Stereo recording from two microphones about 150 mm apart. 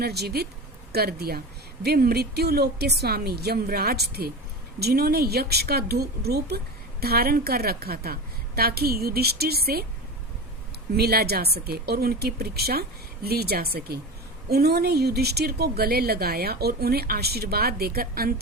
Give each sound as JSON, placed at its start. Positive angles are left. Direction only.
{"t": 0.0, "sound": "a woman's voice", "side_deg": -90}
{"t": 10.9, "sound": "a woman's voice", "side_deg": -90}